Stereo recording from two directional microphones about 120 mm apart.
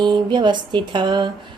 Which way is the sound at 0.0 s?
40° right (ahead or behind).